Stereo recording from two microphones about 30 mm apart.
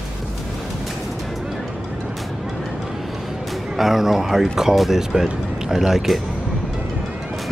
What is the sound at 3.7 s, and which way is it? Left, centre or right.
Speech, centre.